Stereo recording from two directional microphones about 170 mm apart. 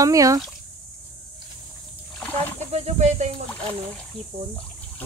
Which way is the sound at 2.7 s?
40° right (ahead or behind).